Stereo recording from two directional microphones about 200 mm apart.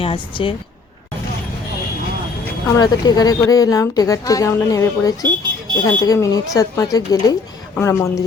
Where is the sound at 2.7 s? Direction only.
20° left (ahead or behind).